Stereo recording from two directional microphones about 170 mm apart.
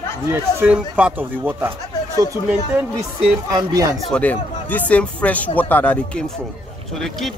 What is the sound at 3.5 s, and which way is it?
Speech, 20° right (ahead or behind).